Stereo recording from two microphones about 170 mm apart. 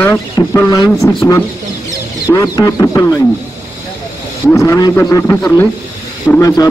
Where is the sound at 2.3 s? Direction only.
20° left (ahead or behind).